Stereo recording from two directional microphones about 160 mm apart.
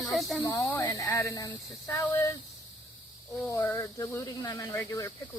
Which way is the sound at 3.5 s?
20° left (ahead or behind).